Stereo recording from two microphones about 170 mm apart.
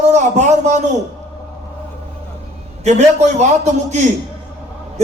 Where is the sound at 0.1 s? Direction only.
45° right (ahead or behind).